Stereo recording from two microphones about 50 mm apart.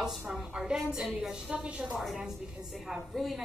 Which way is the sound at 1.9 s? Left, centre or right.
Centre.